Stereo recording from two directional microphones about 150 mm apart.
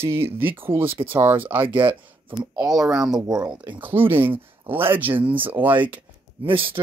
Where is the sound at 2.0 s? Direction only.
35° right (ahead or behind).